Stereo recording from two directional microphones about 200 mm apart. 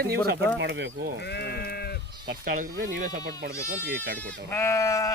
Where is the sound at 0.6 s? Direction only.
60° right (ahead or behind).